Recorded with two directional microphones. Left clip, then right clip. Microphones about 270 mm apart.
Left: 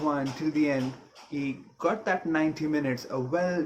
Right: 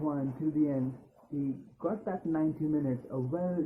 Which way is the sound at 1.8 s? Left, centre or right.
Left.